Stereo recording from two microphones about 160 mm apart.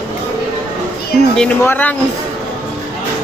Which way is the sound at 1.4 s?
10° left (ahead or behind).